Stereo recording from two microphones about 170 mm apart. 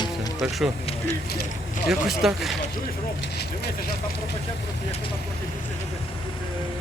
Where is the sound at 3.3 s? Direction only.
70° left (ahead or behind).